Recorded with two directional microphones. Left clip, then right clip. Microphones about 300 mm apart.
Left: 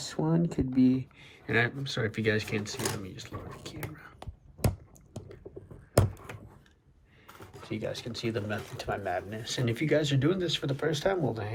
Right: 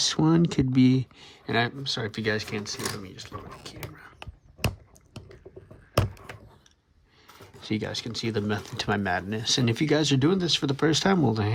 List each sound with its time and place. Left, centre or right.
0.0 s speech: left
0.9 s speech: centre
7.6 s speech: right